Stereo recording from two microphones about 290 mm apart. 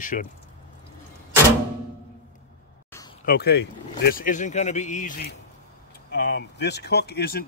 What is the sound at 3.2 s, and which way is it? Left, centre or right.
Speech, left.